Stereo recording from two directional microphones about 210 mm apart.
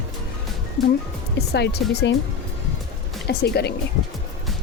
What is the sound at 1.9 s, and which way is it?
Speech, 55° left (ahead or behind).